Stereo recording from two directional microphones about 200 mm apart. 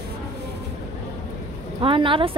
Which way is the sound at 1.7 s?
25° right (ahead or behind).